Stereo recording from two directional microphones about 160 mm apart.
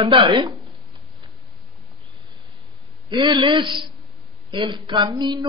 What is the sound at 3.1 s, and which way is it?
Speech, 30° right (ahead or behind).